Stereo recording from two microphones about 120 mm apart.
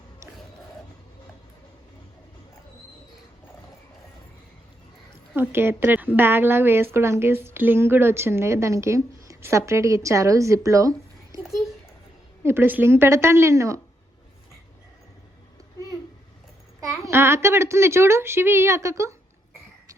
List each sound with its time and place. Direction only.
5.4 s a woman's voice: 20° right (ahead or behind)
11.4 s a sound: centre (ahead or behind)
12.4 s a woman's voice: 20° right (ahead or behind)
16.8 s a child's voice: 20° right (ahead or behind)